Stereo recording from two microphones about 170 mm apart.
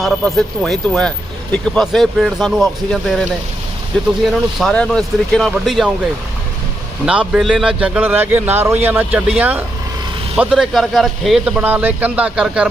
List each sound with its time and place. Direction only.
0.0 s speech: centre (ahead or behind)
7.0 s a man's voice: 5° right (ahead or behind)